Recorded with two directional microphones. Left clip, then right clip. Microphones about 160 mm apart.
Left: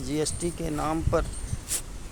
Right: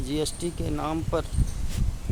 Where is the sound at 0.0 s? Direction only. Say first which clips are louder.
Even; 5° right (ahead or behind).